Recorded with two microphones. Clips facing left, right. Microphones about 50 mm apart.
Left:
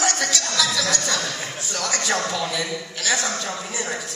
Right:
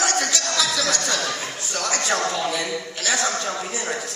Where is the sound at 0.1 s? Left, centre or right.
Right.